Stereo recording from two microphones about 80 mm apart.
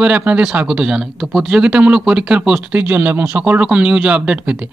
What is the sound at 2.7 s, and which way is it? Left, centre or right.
A man's voice, right.